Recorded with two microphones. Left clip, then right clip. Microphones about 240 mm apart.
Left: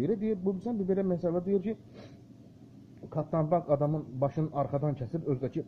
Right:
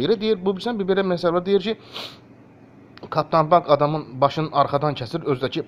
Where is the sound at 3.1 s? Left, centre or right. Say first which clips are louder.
Right 13 dB; centre.